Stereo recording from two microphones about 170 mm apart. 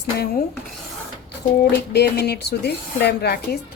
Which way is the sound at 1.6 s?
75° left (ahead or behind).